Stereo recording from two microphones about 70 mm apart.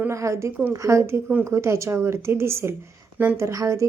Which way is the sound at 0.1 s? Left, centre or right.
Right.